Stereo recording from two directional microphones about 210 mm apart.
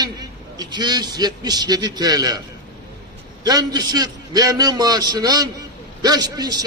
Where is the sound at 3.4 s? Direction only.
20° right (ahead or behind).